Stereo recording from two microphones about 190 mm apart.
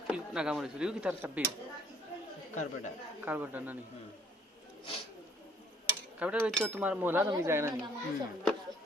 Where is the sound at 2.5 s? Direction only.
40° left (ahead or behind).